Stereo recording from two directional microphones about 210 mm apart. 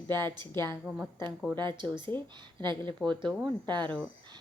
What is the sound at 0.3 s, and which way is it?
Speech, 20° right (ahead or behind).